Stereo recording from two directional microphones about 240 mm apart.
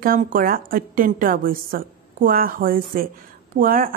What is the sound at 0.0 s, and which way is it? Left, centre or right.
Speech, right.